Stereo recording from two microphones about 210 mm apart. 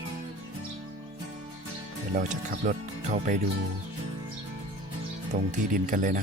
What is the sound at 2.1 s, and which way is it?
Speech, 35° right (ahead or behind).